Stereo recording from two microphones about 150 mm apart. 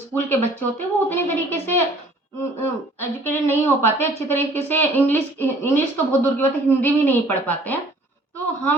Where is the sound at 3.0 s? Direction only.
15° left (ahead or behind).